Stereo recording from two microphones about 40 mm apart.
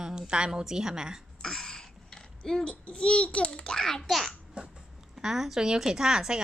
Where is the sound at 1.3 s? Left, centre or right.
Centre.